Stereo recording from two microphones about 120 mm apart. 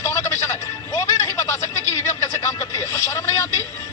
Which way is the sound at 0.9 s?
30° left (ahead or behind).